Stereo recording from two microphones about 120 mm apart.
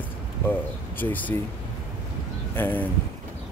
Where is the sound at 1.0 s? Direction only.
15° left (ahead or behind).